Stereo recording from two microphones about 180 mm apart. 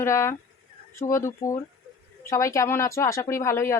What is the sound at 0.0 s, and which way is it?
Speech, 15° left (ahead or behind).